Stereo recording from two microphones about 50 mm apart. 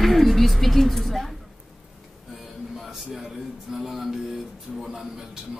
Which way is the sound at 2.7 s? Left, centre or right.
Centre.